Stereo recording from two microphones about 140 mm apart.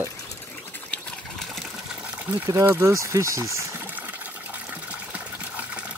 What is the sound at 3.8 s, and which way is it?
Water, 10° right (ahead or behind).